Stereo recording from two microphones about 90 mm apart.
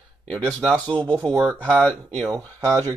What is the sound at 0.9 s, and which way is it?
Speech, 60° right (ahead or behind).